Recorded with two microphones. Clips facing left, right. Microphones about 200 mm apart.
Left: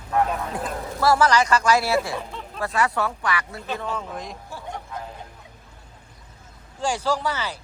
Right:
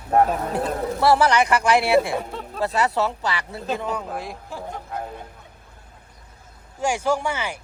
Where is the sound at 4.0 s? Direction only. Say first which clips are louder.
Right 2 dB; 5° right (ahead or behind).